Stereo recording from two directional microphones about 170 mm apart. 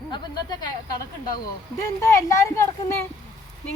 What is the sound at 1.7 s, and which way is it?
Speech, 20° left (ahead or behind).